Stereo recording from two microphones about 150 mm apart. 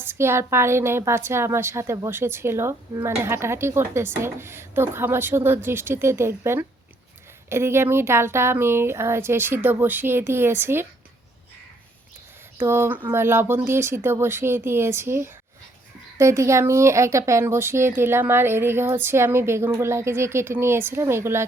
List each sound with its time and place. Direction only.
0.0 s a woman's voice: 15° right (ahead or behind)
12.5 s a woman's voice: 15° right (ahead or behind)